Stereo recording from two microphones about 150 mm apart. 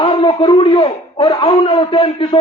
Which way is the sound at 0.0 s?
35° left (ahead or behind).